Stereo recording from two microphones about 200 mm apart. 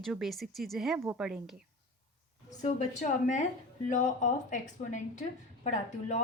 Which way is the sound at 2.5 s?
35° left (ahead or behind).